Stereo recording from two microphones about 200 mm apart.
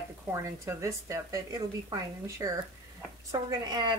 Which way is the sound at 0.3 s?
15° right (ahead or behind).